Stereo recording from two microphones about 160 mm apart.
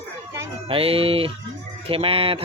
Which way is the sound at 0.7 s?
35° right (ahead or behind).